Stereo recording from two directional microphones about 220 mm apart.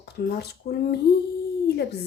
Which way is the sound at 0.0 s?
45° left (ahead or behind).